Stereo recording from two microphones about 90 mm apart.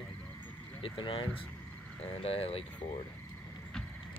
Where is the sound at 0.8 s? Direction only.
75° left (ahead or behind).